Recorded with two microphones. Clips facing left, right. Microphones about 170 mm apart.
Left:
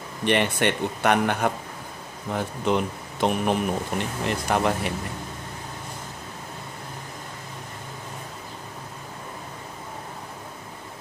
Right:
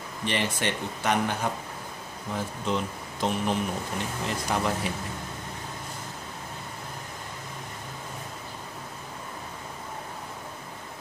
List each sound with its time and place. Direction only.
0.2 s speech: 60° left (ahead or behind)